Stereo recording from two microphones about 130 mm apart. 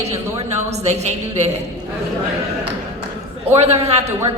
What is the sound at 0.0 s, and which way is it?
A man's voice, 55° right (ahead or behind).